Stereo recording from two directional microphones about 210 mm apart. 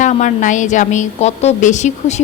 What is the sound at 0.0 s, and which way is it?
A woman's voice, 35° left (ahead or behind).